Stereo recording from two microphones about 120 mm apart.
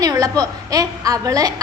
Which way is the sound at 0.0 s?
30° right (ahead or behind).